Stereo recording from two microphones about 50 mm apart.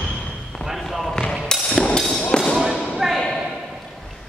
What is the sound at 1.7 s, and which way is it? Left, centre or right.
Hammer, centre.